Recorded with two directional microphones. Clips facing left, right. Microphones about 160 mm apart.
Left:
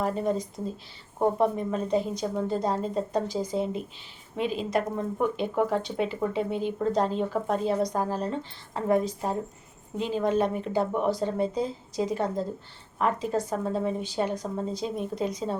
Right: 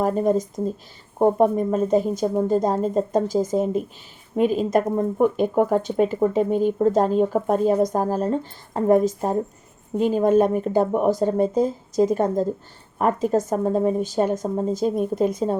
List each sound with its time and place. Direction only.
0.0 s speech: 45° right (ahead or behind)